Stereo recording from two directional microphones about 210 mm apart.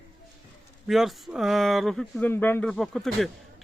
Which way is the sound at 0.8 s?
Centre (ahead or behind).